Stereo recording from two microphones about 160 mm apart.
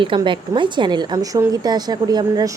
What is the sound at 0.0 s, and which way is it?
A woman's voice, 30° right (ahead or behind).